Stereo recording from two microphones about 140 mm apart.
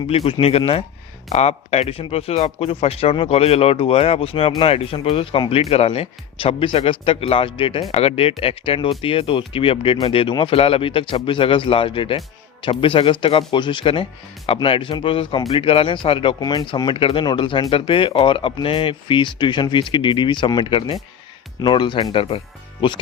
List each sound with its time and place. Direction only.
0.1 s speech: 40° left (ahead or behind)